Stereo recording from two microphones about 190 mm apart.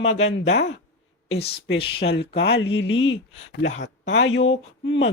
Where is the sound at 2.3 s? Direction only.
65° left (ahead or behind).